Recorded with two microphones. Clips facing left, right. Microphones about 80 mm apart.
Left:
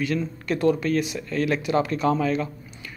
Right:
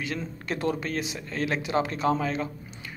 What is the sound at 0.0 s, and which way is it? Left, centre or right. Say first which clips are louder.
Speech: left 7 dB; right.